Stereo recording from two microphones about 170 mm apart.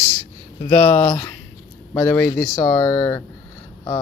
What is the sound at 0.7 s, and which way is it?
Speech, 10° left (ahead or behind).